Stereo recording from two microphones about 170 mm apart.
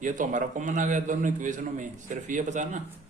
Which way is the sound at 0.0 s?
50° right (ahead or behind).